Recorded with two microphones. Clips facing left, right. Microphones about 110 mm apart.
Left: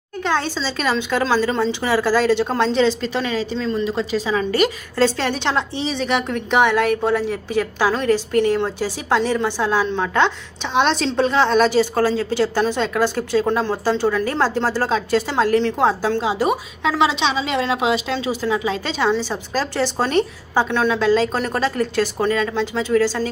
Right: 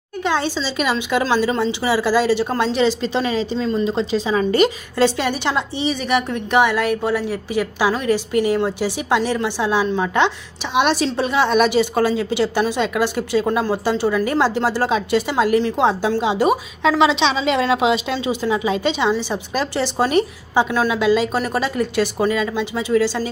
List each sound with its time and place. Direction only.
0.2 s a woman's voice: 10° right (ahead or behind)
3.0 s a woman's voice: 20° right (ahead or behind)
17.7 s a woman's voice: 20° right (ahead or behind)